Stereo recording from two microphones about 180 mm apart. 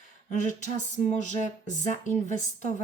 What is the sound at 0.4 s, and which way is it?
Speech, 45° left (ahead or behind).